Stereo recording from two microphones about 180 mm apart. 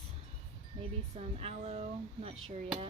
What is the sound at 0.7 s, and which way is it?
Wind chime, 40° right (ahead or behind).